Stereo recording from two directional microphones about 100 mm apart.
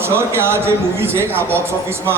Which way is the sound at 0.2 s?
25° right (ahead or behind).